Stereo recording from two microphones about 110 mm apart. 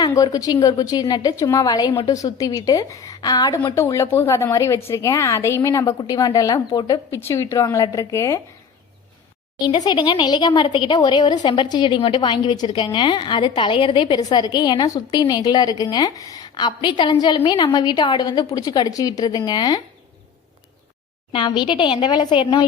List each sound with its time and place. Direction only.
0.0 s speech: 35° left (ahead or behind)
3.8 s a woman's voice: 25° left (ahead or behind)
7.1 s a woman's voice: 25° left (ahead or behind)
9.6 s speech: 40° left (ahead or behind)
21.3 s a woman's voice: 45° left (ahead or behind)